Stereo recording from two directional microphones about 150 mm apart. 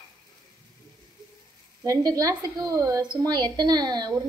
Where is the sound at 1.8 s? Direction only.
20° right (ahead or behind).